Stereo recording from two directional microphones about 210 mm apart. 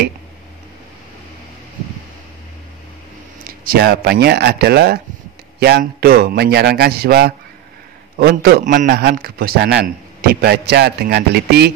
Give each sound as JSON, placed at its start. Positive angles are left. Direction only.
{"t": 3.4, "sound": "a man's voice", "side_deg": -45}